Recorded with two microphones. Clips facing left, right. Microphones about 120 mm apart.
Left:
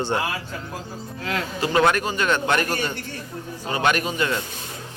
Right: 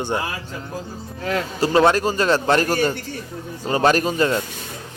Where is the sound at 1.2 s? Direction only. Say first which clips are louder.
Right 4 dB; 35° right (ahead or behind).